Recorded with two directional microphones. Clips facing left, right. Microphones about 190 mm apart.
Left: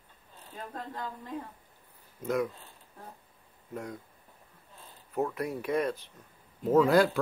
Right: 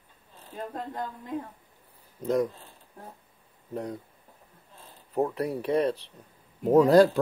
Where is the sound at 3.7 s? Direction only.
35° right (ahead or behind).